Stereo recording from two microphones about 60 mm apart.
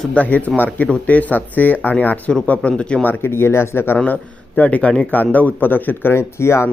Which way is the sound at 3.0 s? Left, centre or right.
Left.